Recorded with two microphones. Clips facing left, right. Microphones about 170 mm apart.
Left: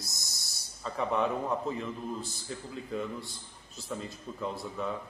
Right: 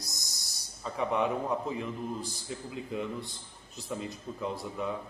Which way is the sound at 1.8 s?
15° right (ahead or behind).